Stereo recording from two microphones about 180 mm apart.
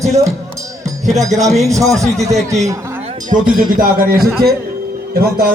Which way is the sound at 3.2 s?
50° right (ahead or behind).